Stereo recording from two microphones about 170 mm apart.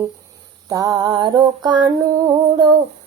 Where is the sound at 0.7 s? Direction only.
20° right (ahead or behind).